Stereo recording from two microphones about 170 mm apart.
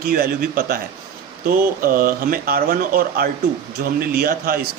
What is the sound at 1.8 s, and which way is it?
A man's voice, 55° right (ahead or behind).